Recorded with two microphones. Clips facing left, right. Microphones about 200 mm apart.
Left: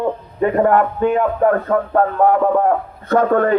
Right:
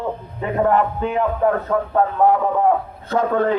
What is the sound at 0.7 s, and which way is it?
Speech, 55° left (ahead or behind).